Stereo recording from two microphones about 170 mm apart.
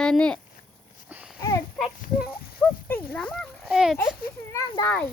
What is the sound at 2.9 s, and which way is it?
Speech, 10° left (ahead or behind).